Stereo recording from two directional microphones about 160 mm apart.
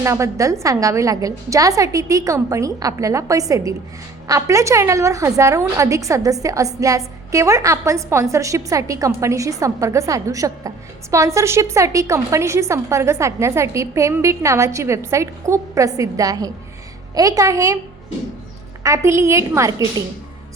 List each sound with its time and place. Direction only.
0.0 s a woman's voice: 20° right (ahead or behind)
18.8 s a woman's voice: 20° right (ahead or behind)